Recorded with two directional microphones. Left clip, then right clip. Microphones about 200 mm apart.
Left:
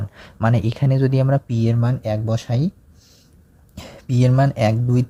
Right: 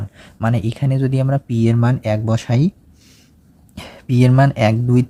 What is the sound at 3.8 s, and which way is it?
Speech, centre (ahead or behind).